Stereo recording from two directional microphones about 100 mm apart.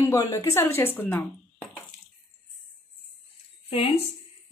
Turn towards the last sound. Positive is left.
turn(degrees=60)  # may be behind; listen again after turning